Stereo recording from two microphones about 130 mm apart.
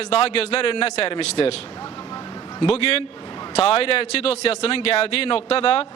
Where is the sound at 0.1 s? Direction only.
50° left (ahead or behind).